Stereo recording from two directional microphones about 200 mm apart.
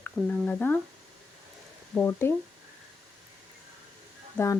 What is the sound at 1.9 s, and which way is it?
Speech, 10° left (ahead or behind).